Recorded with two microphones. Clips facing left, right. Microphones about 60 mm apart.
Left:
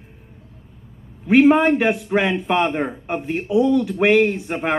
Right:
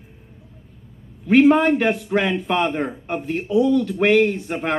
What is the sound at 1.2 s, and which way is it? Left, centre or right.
Speech, centre.